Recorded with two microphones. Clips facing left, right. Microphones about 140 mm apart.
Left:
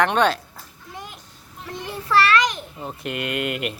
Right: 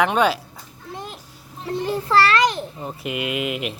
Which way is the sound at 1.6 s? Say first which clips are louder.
Right 8 dB; 30° right (ahead or behind).